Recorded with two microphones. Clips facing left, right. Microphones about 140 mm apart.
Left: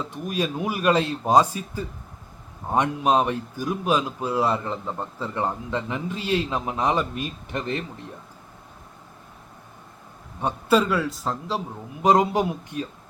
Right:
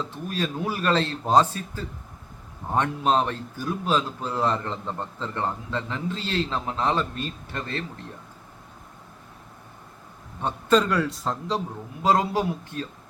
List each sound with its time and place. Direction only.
0.1 s a man's voice: 15° left (ahead or behind)
10.4 s a man's voice: 5° left (ahead or behind)
12.0 s a man's voice: 20° left (ahead or behind)